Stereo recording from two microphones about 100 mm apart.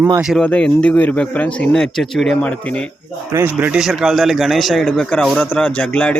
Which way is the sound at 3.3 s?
20° right (ahead or behind).